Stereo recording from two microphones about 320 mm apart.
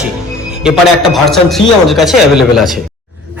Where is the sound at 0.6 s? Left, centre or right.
Centre.